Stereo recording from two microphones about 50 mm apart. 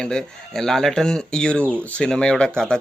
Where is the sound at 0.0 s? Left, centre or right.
Centre.